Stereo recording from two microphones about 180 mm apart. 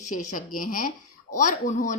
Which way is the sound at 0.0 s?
45° left (ahead or behind).